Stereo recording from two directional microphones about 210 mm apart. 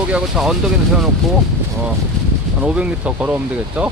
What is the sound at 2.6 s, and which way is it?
Speech, 5° right (ahead or behind).